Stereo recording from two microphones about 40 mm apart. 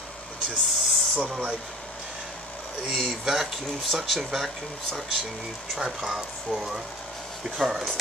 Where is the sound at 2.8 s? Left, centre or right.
Centre.